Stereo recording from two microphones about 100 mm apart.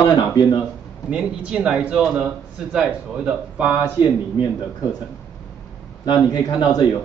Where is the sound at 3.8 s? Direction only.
40° left (ahead or behind).